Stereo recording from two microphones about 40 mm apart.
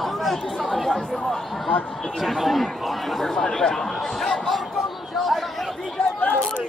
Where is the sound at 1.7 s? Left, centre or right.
Left.